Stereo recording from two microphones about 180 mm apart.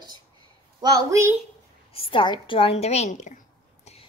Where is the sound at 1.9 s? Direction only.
25° left (ahead or behind).